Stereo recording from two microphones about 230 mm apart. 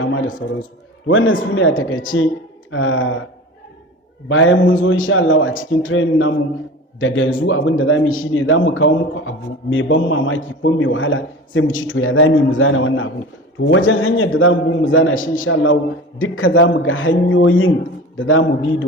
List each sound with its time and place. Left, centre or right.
0.0 s a sound: left
1.0 s a man's voice: left
4.3 s a man's voice: left